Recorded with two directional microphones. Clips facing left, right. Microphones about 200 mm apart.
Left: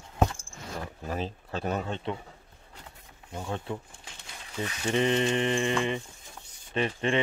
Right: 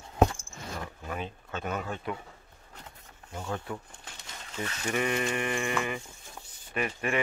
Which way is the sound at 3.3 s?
20° left (ahead or behind).